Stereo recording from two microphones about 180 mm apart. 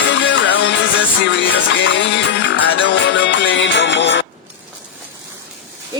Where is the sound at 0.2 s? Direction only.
85° left.